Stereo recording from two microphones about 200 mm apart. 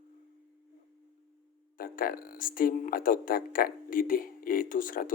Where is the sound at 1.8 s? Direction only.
45° left (ahead or behind).